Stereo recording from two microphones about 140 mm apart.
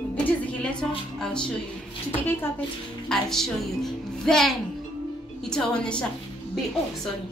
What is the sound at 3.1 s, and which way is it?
Speech, 5° left (ahead or behind).